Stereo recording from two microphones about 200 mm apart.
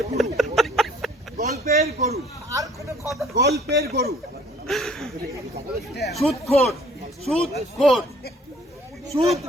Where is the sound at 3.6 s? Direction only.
55° right (ahead or behind).